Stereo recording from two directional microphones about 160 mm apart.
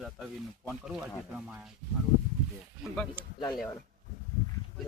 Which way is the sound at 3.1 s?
30° left (ahead or behind).